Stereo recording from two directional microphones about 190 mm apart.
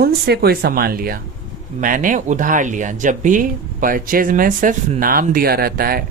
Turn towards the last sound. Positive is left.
turn(degrees=-50)  # may be behind; listen again after turning